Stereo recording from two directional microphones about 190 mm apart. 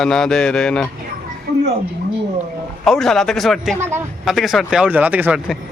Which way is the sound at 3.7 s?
10° right (ahead or behind).